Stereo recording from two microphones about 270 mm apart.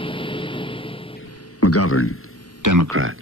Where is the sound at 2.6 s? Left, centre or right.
Right.